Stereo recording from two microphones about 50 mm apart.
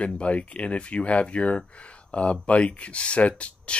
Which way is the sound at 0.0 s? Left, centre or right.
Left.